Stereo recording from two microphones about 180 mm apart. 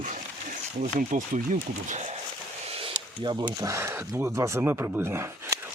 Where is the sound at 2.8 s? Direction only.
25° right (ahead or behind).